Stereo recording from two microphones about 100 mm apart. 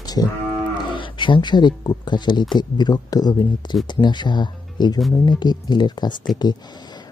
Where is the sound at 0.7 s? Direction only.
55° left (ahead or behind).